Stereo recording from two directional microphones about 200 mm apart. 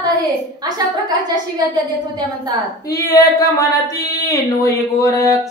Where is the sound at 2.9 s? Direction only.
20° left (ahead or behind).